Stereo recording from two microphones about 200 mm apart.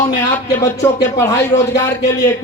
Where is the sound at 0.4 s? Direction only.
15° left (ahead or behind).